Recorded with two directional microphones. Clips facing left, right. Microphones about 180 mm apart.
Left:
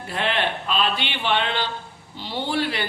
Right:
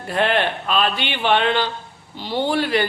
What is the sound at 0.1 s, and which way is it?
Speech, 50° right (ahead or behind).